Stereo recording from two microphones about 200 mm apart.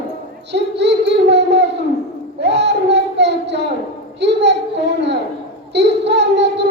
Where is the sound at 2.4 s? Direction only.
60° right (ahead or behind).